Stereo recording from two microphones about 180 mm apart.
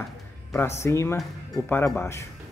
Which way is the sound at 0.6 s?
15° left (ahead or behind).